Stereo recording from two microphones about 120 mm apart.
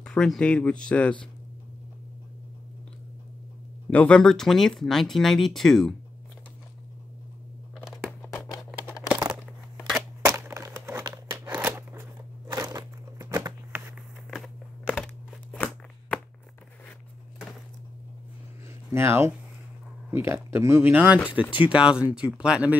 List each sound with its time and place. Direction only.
0.0 s speech: 5° left (ahead or behind)
3.9 s speech: 10° left (ahead or behind)
7.7 s crunch: centre (ahead or behind)
9.1 s a sound: 5° right (ahead or behind)
10.2 s a sound: 20° right (ahead or behind)
11.4 s scissors: 15° right (ahead or behind)
11.7 s crunch: 20° right (ahead or behind)
12.5 s a sound: 30° right (ahead or behind)
14.3 s a sound: 5° left (ahead or behind)
18.9 s speech: 20° right (ahead or behind)
21.3 s speech: 45° left (ahead or behind)
21.6 s speech: 10° right (ahead or behind)